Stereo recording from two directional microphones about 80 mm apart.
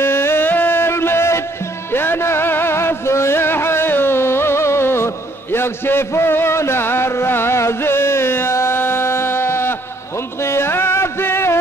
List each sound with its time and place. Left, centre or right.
0.0 s music: left